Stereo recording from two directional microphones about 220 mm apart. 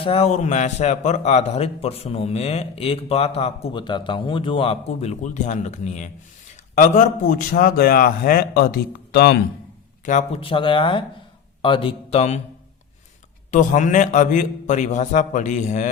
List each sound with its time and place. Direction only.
0.0 s a man's voice: 25° left (ahead or behind); by 9.4 s 45° left (ahead or behind)
10.1 s a man's voice: 30° left (ahead or behind)
13.5 s a man's voice: 35° left (ahead or behind)